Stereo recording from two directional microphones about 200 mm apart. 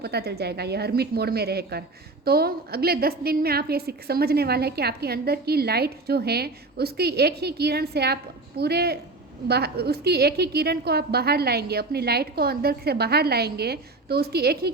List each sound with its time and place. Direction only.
0.0 s a woman's voice: 55° right (ahead or behind)